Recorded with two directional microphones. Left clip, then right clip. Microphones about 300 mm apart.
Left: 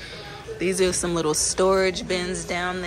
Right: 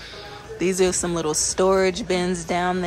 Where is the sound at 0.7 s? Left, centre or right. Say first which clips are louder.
Right 1 dB; centre.